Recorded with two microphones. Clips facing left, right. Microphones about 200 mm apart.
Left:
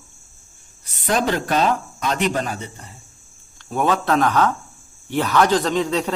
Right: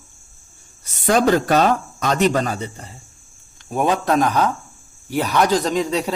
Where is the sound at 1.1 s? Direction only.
45° right (ahead or behind).